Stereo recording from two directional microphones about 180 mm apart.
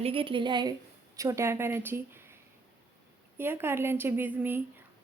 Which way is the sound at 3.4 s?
10° right (ahead or behind).